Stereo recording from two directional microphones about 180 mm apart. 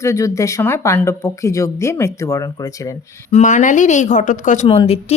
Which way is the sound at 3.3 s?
45° left (ahead or behind).